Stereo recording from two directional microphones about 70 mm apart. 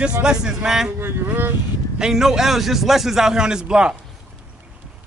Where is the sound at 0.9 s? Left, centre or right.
Right.